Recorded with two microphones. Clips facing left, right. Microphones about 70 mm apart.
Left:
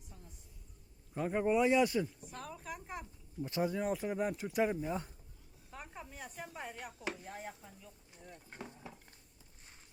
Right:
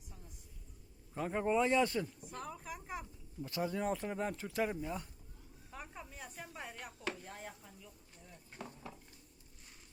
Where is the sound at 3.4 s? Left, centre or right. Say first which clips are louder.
Left 3 dB; left.